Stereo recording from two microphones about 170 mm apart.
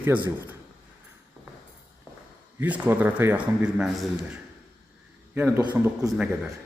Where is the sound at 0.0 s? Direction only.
10° right (ahead or behind).